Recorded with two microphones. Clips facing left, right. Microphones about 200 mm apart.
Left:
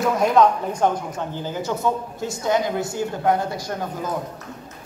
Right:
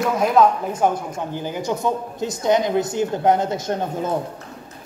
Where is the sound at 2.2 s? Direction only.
20° right (ahead or behind).